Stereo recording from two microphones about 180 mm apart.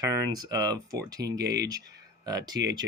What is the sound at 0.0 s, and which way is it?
Speech, 20° right (ahead or behind).